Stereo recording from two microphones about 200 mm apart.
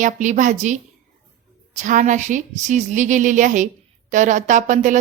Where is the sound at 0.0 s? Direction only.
40° right (ahead or behind).